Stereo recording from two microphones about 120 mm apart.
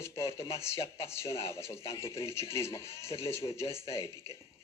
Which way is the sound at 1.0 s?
20° left (ahead or behind).